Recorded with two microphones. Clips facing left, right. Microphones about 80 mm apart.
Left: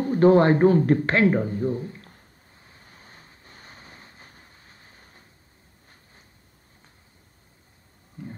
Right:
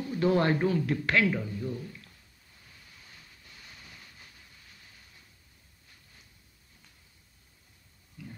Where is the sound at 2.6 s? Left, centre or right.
Left.